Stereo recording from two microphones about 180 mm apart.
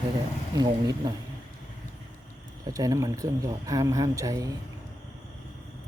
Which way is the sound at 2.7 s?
20° right (ahead or behind).